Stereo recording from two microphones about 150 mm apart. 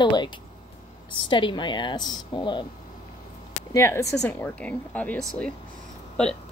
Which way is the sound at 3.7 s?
20° left (ahead or behind).